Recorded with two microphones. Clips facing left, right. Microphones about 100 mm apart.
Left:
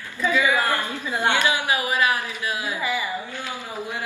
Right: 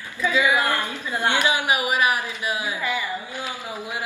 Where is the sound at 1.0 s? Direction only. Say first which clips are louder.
Left 1 dB; 20° left (ahead or behind).